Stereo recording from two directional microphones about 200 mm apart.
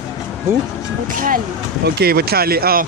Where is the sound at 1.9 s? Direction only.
50° right (ahead or behind).